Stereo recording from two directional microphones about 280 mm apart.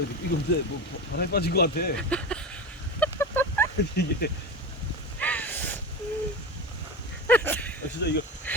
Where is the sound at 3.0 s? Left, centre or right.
Centre.